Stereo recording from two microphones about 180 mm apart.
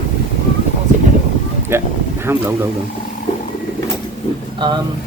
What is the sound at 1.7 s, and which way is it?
Speech, 15° right (ahead or behind).